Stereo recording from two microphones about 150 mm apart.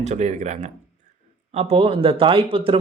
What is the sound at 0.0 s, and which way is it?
Speech, 50° right (ahead or behind).